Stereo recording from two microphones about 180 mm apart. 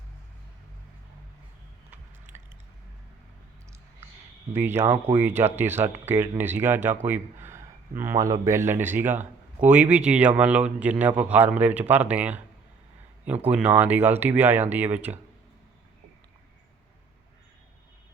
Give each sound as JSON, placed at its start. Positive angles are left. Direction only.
{"t": 1.9, "sound": "biting", "side_deg": -10}
{"t": 4.5, "sound": "speech", "side_deg": -10}
{"t": 13.4, "sound": "speech", "side_deg": -10}